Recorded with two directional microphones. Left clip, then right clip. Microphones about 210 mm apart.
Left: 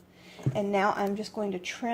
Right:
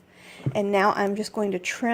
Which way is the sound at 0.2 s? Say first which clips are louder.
Right 5 dB; 45° right (ahead or behind).